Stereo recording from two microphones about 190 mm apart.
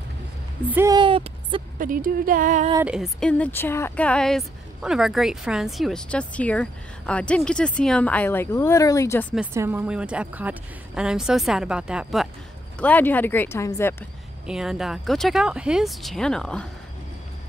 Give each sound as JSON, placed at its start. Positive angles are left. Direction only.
{"t": 0.7, "sound": "speech", "side_deg": -10}
{"t": 0.9, "sound": "a sound", "side_deg": -25}
{"t": 1.8, "sound": "speech", "side_deg": -45}
{"t": 2.8, "sound": "speech", "side_deg": -5}
{"t": 9.5, "sound": "speech", "side_deg": -10}
{"t": 12.7, "sound": "speech", "side_deg": 10}
{"t": 14.4, "sound": "speech", "side_deg": -5}